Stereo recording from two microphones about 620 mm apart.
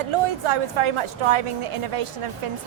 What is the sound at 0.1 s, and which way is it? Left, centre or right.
A woman's voice, right.